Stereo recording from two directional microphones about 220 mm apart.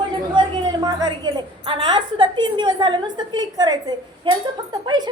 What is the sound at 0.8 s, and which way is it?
A woman's voice, 15° right (ahead or behind).